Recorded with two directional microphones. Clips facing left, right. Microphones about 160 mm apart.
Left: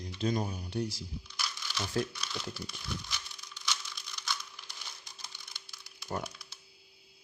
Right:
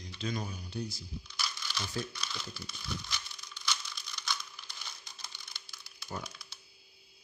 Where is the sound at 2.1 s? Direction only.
15° left (ahead or behind).